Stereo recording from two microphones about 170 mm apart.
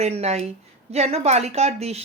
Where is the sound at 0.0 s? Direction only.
40° right (ahead or behind).